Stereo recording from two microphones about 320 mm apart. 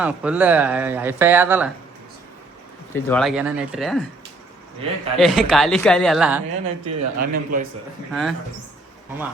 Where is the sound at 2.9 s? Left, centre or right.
Centre.